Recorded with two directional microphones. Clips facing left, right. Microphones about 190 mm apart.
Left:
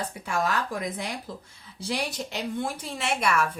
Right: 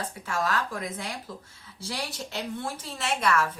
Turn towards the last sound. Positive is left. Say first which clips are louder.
# even
turn(degrees=15)  # may be behind; listen again after turning